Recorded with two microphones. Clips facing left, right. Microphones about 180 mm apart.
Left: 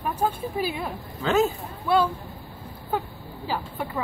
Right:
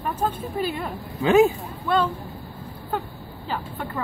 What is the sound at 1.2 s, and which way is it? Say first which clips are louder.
Speech: right 5 dB; 15° right (ahead or behind).